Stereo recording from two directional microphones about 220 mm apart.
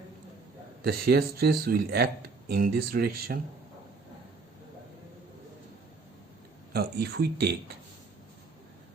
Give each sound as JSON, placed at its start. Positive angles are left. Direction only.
{"t": 0.9, "sound": "speech", "side_deg": -45}
{"t": 6.7, "sound": "speech", "side_deg": -45}